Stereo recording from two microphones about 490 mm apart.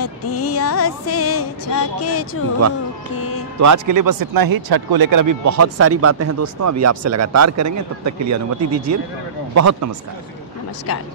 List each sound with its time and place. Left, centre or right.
0.0 s music: left
3.5 s speech: right